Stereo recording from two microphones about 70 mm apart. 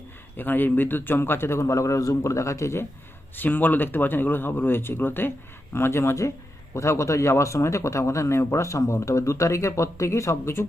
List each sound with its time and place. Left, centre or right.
0.3 s a man's voice: left
3.3 s a man's voice: left